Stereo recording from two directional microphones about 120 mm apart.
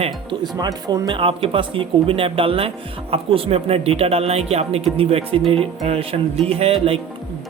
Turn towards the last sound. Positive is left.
turn(degrees=-50)  # may be behind; listen again after turning